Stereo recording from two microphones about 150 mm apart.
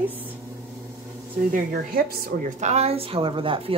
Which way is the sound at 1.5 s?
70° right (ahead or behind).